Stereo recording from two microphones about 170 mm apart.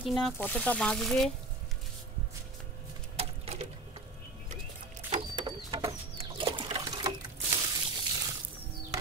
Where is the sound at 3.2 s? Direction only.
40° right (ahead or behind).